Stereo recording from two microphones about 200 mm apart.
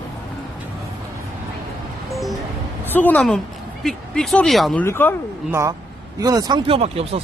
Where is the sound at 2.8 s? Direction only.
10° left (ahead or behind).